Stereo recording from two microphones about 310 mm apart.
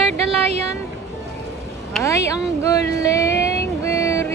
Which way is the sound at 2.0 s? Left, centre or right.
Centre.